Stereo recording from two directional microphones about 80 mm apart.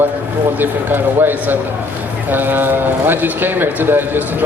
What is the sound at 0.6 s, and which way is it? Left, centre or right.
A man's voice, right.